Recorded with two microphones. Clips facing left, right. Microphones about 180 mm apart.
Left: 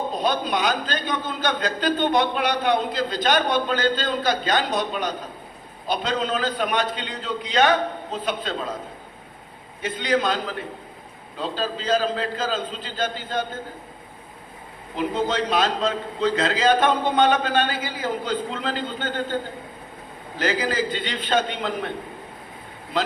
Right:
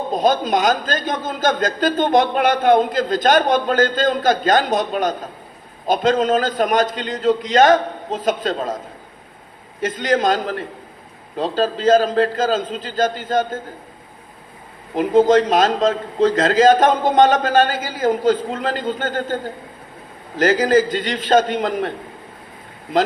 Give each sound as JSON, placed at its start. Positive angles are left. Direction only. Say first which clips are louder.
{"t": 0.1, "sound": "a man's voice", "louder": "right 11 dB", "side_deg": -45}
{"t": 9.8, "sound": "a man's voice", "louder": "right 5 dB", "side_deg": -45}
{"t": 14.9, "sound": "a man's voice", "louder": "right 10 dB", "side_deg": -45}
{"t": 20.4, "sound": "a man's voice", "louder": "right 9 dB", "side_deg": -45}